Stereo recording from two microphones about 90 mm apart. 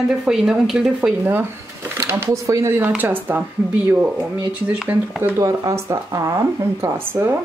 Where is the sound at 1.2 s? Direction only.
25° right (ahead or behind).